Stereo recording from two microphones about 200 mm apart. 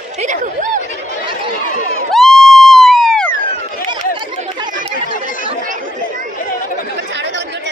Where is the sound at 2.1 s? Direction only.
Centre (ahead or behind).